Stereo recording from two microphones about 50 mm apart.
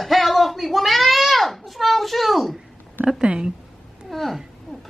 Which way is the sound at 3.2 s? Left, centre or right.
Centre.